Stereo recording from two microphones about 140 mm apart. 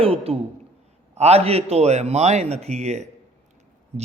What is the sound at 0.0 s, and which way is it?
Speech, 45° right (ahead or behind).